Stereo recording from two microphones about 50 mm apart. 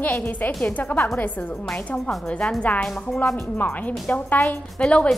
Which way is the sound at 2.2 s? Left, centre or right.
Left.